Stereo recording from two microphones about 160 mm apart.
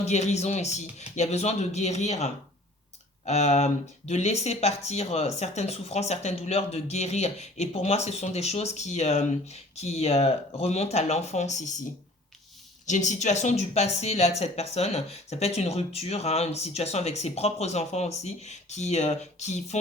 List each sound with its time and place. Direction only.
0.0 s speech: 45° left (ahead or behind)
12.8 s speech: 50° left (ahead or behind)